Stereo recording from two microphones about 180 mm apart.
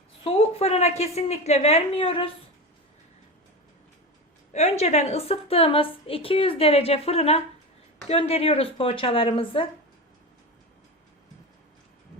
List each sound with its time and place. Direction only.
0.3 s a woman's voice: 35° left (ahead or behind)
4.5 s a woman's voice: 35° left (ahead or behind)